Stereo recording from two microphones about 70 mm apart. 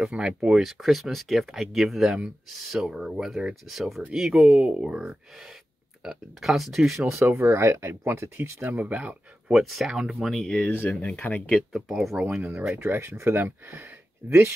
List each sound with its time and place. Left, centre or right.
0.1 s speech: centre
7.1 s speech: right
8.6 s speech: right
9.5 s speech: centre
11.0 s speech: left
11.7 s speech: centre
12.7 s speech: right